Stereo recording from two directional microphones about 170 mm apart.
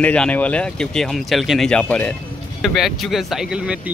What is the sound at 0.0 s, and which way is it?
Speech, 5° left (ahead or behind).